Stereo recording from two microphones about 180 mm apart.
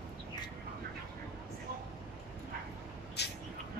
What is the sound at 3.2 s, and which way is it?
Vehicle, 70° left (ahead or behind).